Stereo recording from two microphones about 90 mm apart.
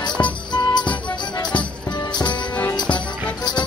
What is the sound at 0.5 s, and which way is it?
Music, 55° left (ahead or behind).